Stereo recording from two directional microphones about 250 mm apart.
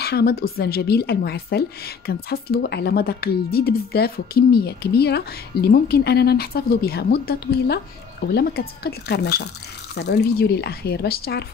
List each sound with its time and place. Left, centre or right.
0.0 s speech: left